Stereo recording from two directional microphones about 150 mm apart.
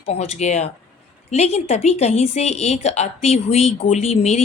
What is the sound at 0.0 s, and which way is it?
Speech, 45° left (ahead or behind).